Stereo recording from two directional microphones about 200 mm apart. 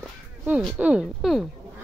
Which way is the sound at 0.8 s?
5° right (ahead or behind).